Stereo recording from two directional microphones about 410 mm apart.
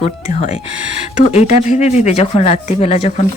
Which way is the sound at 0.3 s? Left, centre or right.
Centre.